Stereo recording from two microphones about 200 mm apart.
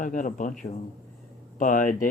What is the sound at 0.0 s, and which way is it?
Speech, 40° left (ahead or behind).